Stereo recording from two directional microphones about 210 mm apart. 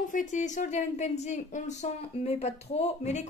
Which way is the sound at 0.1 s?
35° left (ahead or behind).